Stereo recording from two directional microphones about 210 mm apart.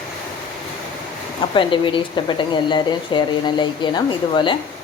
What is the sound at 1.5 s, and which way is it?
Speech, 25° left (ahead or behind).